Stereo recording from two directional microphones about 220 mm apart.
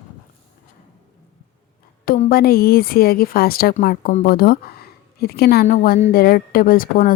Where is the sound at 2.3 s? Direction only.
45° left (ahead or behind).